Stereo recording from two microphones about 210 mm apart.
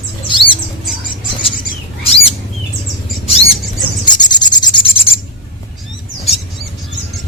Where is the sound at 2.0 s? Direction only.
25° left (ahead or behind).